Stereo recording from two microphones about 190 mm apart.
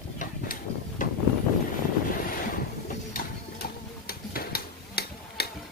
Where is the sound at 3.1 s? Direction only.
50° left (ahead or behind).